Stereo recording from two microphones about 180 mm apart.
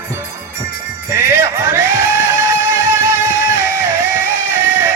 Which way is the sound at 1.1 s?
15° right (ahead or behind).